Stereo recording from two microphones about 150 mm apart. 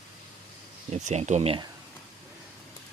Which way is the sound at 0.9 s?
50° right (ahead or behind).